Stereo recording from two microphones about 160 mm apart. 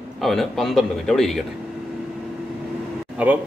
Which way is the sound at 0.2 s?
Centre (ahead or behind).